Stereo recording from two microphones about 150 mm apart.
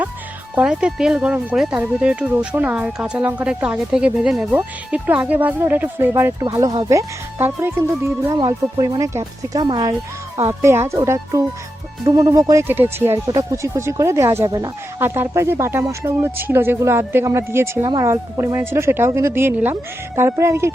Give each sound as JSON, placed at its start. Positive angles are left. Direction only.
{"t": 0.5, "sound": "speech", "side_deg": -5}
{"t": 10.3, "sound": "speech", "side_deg": -20}